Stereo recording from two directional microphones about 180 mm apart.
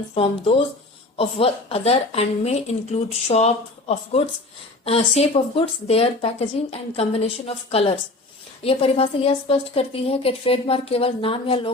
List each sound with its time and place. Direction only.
0.1 s a woman's voice: 30° left (ahead or behind)